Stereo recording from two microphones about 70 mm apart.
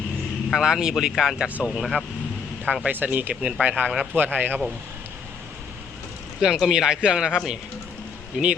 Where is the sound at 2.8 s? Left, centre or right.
Right.